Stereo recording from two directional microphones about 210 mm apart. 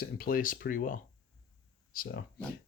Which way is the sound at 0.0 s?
45° left (ahead or behind).